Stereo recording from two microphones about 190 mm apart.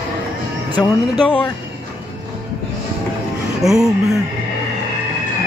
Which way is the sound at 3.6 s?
Centre (ahead or behind).